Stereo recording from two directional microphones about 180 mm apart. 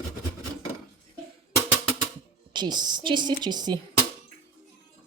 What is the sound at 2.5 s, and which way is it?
Speech, 25° right (ahead or behind).